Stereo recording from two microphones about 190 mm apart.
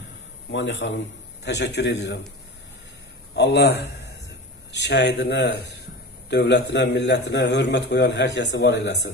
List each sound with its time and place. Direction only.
0.5 s a man's voice: 70° left (ahead or behind)
3.3 s a man's voice: 65° left (ahead or behind)